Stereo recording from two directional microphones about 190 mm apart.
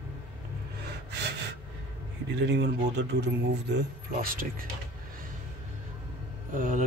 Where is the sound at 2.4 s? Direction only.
65° right (ahead or behind).